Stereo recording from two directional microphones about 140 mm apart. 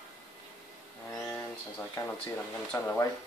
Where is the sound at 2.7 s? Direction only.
15° left (ahead or behind).